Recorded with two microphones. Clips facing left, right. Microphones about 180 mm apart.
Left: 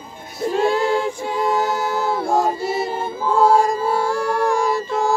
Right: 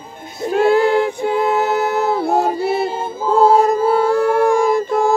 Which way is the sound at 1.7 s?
60° right (ahead or behind).